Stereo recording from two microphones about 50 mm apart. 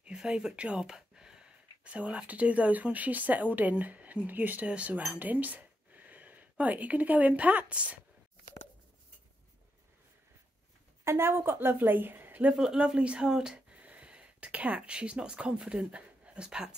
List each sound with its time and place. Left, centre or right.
0.0 s speech: centre
0.9 s a sound: centre
1.9 s speech: right
5.1 s chink: right
6.6 s a woman's voice: right
11.1 s a woman's voice: right
12.5 s a woman's voice: centre
13.3 s speech: centre
13.7 s a sound: right
15.6 s speech: centre